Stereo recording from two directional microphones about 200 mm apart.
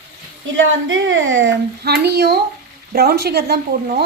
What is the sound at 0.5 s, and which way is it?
A child's voice, 70° right (ahead or behind).